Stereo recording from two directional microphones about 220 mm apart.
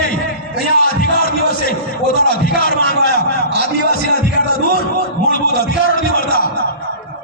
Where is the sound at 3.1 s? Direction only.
40° left (ahead or behind).